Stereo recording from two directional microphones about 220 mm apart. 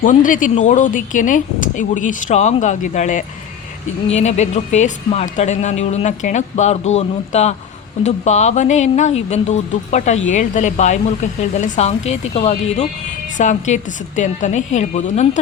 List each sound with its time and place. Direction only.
0.0 s a woman's voice: 35° left (ahead or behind)